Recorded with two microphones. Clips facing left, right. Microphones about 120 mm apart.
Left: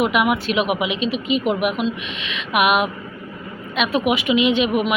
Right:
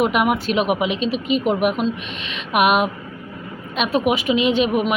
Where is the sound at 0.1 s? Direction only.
40° right (ahead or behind).